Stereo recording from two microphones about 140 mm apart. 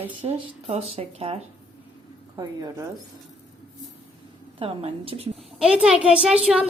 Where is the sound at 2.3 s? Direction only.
25° right (ahead or behind).